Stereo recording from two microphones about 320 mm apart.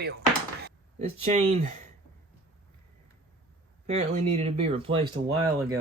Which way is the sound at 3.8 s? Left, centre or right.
Centre.